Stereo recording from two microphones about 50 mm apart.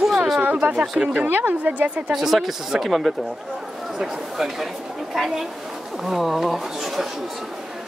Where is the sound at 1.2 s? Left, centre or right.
Right.